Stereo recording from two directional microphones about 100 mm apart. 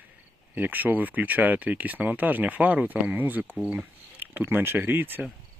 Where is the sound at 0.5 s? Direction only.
20° right (ahead or behind).